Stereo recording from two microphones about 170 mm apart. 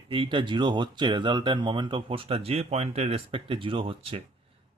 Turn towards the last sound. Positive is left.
turn(degrees=-30)  # may be behind; listen again after turning